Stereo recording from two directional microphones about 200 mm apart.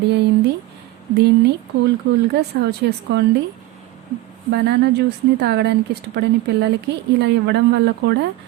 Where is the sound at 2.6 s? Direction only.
55° right (ahead or behind).